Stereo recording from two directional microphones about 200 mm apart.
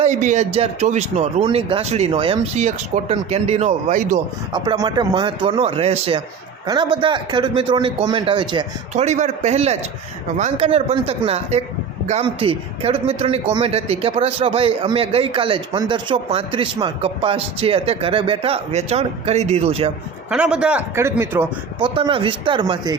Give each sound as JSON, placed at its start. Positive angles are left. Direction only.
{"t": 0.0, "sound": "a man's voice", "side_deg": -35}
{"t": 4.5, "sound": "speech", "side_deg": -20}
{"t": 8.9, "sound": "a man's voice", "side_deg": -35}
{"t": 20.3, "sound": "a man's voice", "side_deg": -5}
{"t": 21.9, "sound": "speech", "side_deg": -25}